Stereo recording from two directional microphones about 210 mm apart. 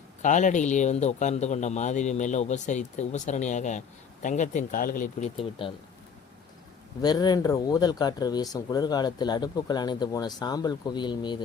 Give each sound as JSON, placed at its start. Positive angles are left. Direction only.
{"t": 0.2, "sound": "speech", "side_deg": 35}
{"t": 5.6, "sound": "speech", "side_deg": 25}
{"t": 7.0, "sound": "speech", "side_deg": 20}